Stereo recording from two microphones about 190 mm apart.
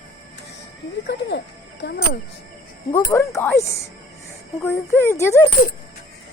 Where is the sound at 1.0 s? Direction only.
65° left (ahead or behind).